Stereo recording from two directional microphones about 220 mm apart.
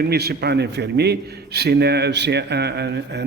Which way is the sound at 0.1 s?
45° right (ahead or behind).